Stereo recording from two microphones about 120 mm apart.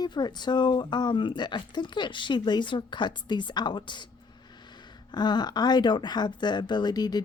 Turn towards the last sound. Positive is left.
turn(degrees=35)  # may be behind; listen again after turning